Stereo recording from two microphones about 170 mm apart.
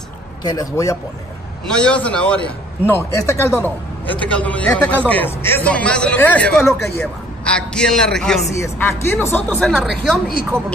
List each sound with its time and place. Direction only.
0.4 s a man's voice: 20° left (ahead or behind)
1.7 s a man's voice: 5° left (ahead or behind)
2.9 s a man's voice: 15° left (ahead or behind)
8.5 s a man's voice: 15° left (ahead or behind)